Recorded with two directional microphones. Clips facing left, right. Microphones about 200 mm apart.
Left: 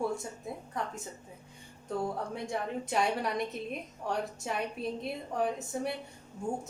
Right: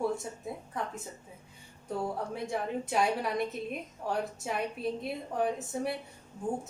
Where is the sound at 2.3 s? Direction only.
Centre (ahead or behind).